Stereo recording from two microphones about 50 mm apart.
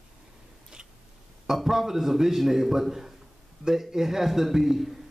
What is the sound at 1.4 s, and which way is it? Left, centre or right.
A man's voice, centre.